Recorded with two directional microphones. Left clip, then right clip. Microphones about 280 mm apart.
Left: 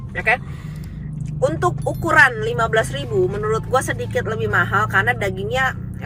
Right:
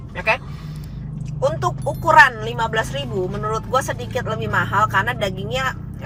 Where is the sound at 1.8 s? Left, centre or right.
Centre.